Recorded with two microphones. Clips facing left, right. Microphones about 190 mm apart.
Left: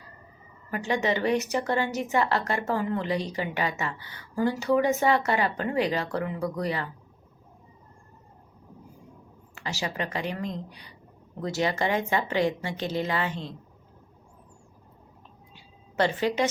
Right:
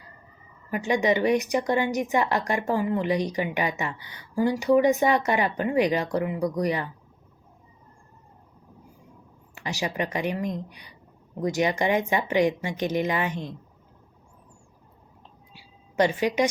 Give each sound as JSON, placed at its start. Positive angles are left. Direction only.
{"t": 0.7, "sound": "a woman's voice", "side_deg": -15}
{"t": 9.6, "sound": "a woman's voice", "side_deg": -15}
{"t": 15.5, "sound": "a sound", "side_deg": -15}